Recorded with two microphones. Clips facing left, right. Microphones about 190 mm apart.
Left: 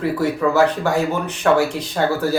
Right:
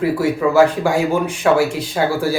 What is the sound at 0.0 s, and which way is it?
Speech, 10° right (ahead or behind).